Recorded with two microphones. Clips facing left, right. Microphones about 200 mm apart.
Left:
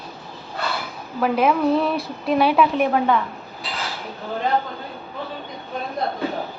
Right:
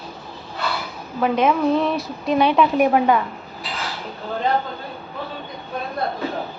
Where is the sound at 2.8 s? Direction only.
10° right (ahead or behind).